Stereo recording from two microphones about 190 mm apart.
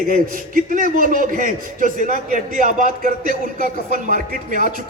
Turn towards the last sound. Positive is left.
turn(degrees=-45)  # may be behind; listen again after turning